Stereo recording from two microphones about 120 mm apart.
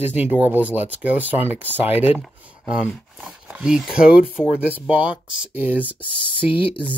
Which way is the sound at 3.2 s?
10° right (ahead or behind).